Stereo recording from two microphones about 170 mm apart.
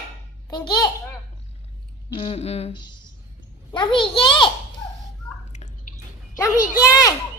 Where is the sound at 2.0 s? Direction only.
30° left (ahead or behind).